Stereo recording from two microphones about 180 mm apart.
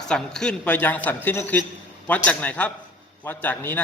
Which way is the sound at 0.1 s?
5° left (ahead or behind).